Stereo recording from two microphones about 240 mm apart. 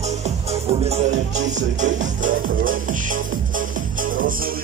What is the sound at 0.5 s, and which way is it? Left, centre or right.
Music, right.